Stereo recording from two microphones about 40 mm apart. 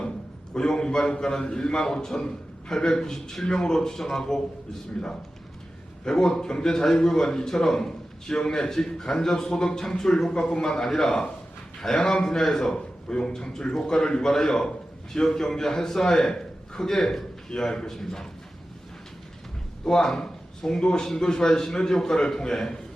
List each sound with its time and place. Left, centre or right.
0.5 s a man's voice: centre
19.8 s a man's voice: centre